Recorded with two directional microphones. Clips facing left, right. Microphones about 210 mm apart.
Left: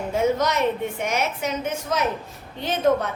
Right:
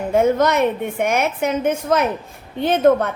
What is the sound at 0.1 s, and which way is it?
A woman's voice, 55° right (ahead or behind).